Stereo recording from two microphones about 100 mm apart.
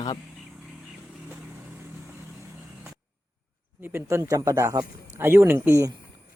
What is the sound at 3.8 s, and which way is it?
Speech, 25° right (ahead or behind).